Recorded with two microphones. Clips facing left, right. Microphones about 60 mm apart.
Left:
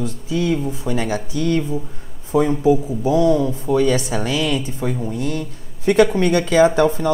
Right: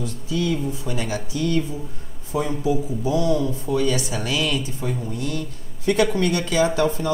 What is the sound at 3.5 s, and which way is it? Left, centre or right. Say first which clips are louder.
Speech: left 5 dB; left.